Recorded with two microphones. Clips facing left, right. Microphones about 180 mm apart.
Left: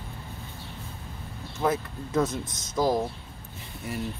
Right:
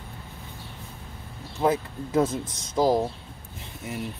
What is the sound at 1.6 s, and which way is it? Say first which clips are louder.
Speech: right 3 dB; 30° right (ahead or behind).